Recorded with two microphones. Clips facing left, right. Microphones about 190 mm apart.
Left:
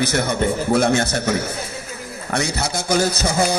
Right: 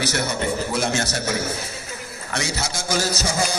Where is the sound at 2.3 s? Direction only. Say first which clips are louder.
Left 5 dB; 55° left (ahead or behind).